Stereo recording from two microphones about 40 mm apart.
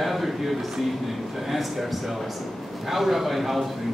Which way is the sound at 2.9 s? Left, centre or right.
Centre.